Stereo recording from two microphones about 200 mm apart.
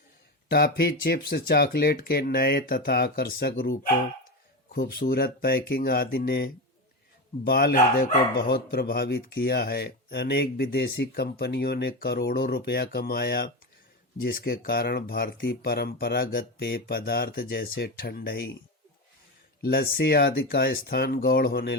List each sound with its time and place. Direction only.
0.5 s speech: 50° left (ahead or behind)
4.7 s speech: 50° left (ahead or behind)
19.6 s speech: 50° left (ahead or behind)